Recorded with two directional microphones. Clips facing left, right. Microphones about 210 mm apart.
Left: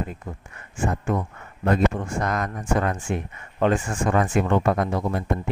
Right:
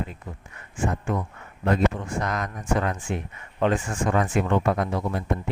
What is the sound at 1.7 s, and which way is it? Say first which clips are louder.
Speech: left 1 dB; 45° left (ahead or behind).